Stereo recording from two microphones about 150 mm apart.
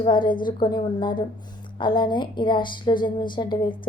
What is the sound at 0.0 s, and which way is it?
A woman's voice, 30° left (ahead or behind).